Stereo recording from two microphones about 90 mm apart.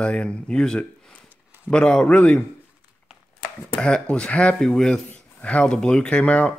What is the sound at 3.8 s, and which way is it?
Speech, 10° left (ahead or behind).